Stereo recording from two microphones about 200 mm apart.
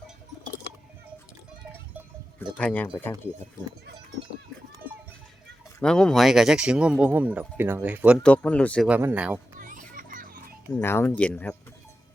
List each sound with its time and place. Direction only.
2.6 s speech: 5° left (ahead or behind)
5.8 s speech: 5° left (ahead or behind)
8.2 s speech: 5° left (ahead or behind)
8.9 s speech: 10° right (ahead or behind)
9.6 s children playing: 40° right (ahead or behind)
10.7 s speech: 10° left (ahead or behind)